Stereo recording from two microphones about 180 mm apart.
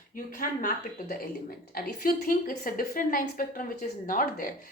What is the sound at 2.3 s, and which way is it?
A woman's voice, 50° left (ahead or behind).